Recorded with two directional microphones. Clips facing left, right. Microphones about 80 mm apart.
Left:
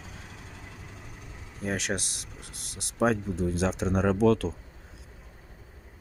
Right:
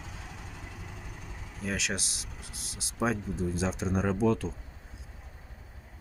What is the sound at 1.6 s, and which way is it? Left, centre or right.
Speech, left.